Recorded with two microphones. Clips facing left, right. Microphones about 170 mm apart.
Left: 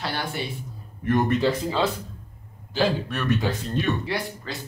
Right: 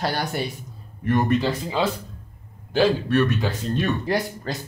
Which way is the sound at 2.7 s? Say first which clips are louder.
Right 4 dB; 55° right (ahead or behind).